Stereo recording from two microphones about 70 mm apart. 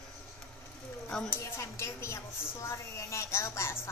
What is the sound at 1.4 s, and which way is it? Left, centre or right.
A woman's voice, left.